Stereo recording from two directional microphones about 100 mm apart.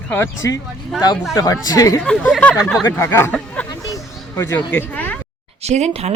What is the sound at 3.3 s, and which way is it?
Speech, 10° left (ahead or behind).